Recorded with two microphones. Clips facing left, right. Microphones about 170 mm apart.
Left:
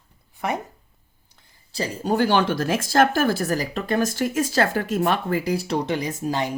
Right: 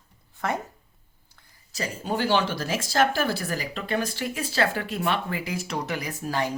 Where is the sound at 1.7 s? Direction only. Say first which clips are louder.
Left 6 dB; 35° left (ahead or behind).